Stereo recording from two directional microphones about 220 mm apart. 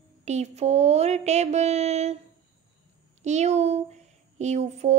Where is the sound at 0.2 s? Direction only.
30° right (ahead or behind).